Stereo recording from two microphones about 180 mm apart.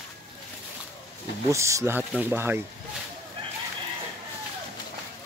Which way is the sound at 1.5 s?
15° right (ahead or behind).